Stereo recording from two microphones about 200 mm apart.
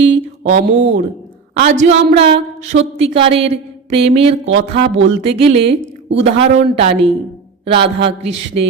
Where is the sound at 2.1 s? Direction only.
55° right (ahead or behind).